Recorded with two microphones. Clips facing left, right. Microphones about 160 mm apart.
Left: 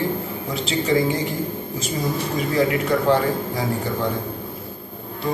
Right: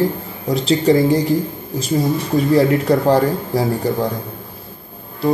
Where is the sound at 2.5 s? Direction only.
35° right (ahead or behind).